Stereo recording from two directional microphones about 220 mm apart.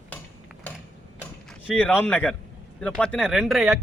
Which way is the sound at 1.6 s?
5° left (ahead or behind).